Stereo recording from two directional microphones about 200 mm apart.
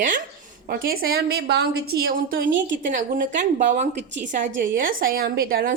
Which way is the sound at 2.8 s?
40° right (ahead or behind).